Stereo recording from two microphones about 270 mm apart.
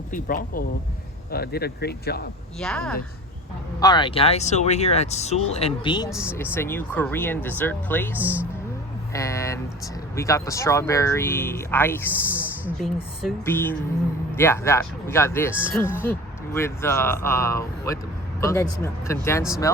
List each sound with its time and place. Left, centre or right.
0.1 s speech: left
2.6 s speech: centre
3.8 s speech: centre
6.1 s speech: centre
6.3 s speech: centre
15.5 s speech: centre
15.8 s speech: centre